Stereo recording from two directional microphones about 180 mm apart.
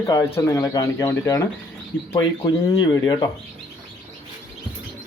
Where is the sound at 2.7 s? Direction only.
20° left (ahead or behind).